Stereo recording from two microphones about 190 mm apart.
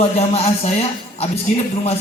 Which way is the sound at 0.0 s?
30° left (ahead or behind).